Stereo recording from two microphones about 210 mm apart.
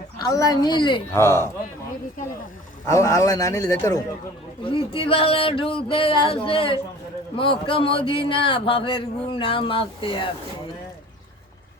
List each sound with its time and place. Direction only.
0.2 s speech: 15° left (ahead or behind)
2.8 s a man's voice: 15° left (ahead or behind)